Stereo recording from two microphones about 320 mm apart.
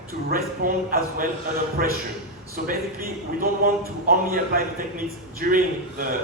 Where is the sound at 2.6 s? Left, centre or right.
Right.